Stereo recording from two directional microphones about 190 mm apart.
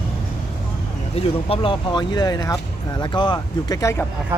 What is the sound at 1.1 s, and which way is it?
Speech, 30° left (ahead or behind).